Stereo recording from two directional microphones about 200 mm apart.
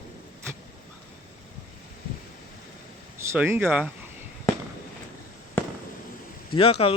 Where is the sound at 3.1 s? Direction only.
10° right (ahead or behind).